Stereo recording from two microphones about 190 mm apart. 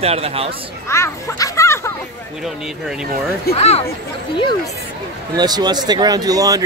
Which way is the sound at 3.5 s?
35° left (ahead or behind).